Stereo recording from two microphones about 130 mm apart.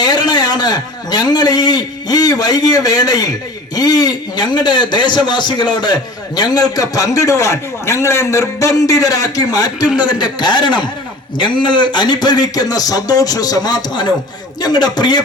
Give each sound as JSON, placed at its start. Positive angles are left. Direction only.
{"t": 0.0, "sound": "a man's voice", "side_deg": 30}